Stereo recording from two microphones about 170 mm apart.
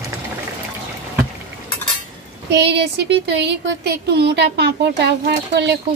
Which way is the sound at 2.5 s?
85° right.